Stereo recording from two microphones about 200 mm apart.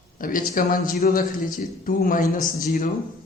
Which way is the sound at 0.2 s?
45° left (ahead or behind).